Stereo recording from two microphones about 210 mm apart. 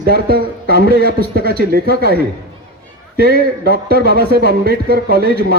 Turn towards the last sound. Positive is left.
turn(degrees=-45)  # may be behind; listen again after turning